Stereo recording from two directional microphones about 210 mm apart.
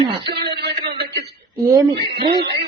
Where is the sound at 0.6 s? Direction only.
50° right (ahead or behind).